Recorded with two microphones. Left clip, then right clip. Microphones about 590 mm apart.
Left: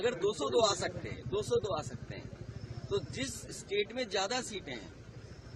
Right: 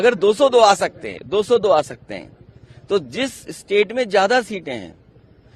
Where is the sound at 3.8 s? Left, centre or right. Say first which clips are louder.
Right 18 dB; right.